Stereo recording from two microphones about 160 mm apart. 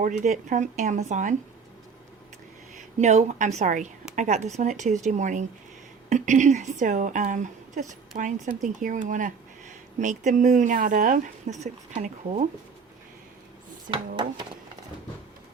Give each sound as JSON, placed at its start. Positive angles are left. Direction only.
{"t": 0.0, "sound": "a woman's voice", "side_deg": -50}
{"t": 3.0, "sound": "a woman's voice", "side_deg": -45}